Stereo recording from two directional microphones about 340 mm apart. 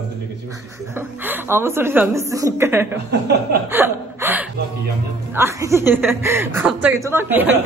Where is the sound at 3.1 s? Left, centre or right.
Right.